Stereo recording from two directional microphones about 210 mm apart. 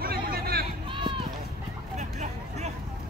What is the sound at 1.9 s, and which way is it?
Vehicle, 35° right (ahead or behind).